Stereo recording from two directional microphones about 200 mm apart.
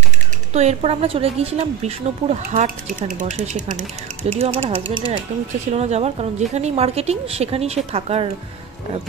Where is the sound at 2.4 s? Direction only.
45° right (ahead or behind).